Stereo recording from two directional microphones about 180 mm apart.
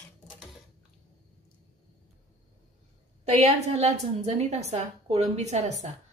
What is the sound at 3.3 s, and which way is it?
Speech, 40° right (ahead or behind).